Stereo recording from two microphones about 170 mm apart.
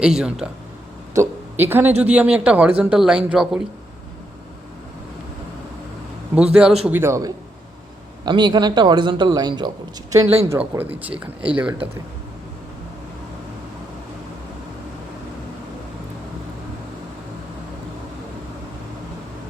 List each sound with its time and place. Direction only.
0.0 s speech: 5° right (ahead or behind)
6.3 s a man's voice: 5° right (ahead or behind); by 10.2 s 20° right (ahead or behind)
10.5 s speech: 10° right (ahead or behind)